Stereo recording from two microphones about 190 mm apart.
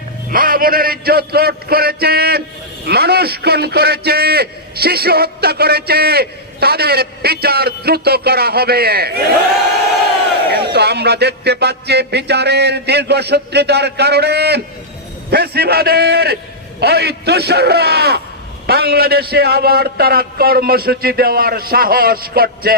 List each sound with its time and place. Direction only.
0.3 s a man's voice: 50° right (ahead or behind)
10.7 s a man's voice: 60° right (ahead or behind)